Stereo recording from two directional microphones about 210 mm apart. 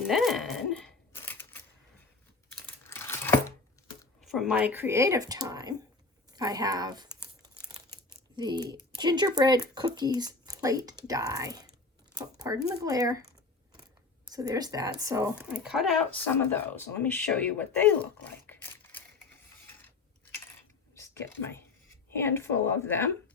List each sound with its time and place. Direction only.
0.1 s a sound: centre (ahead or behind)
2.6 s crumpling: 10° left (ahead or behind)
4.2 s speech: centre (ahead or behind); by 7.2 s 20° right (ahead or behind)
8.4 s speech: 20° right (ahead or behind)
14.3 s speech: 15° right (ahead or behind)
15.4 s speech: 5° right (ahead or behind)
20.9 s a sound: 10° left (ahead or behind)
22.2 s speech: 10° left (ahead or behind)